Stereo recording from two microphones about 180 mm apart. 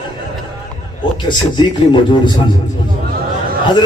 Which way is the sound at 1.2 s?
25° left (ahead or behind).